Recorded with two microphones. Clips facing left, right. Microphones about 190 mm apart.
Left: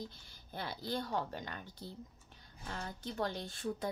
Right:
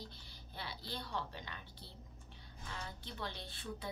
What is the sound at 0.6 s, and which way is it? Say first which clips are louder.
A woman's voice: left 8 dB; 50° left (ahead or behind).